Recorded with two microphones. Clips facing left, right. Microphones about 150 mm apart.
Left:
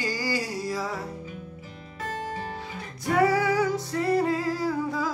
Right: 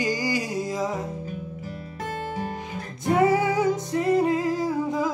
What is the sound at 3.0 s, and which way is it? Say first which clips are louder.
Music: right 2 dB; 20° right (ahead or behind).